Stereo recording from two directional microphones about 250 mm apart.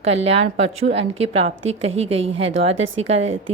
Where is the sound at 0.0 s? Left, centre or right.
Right.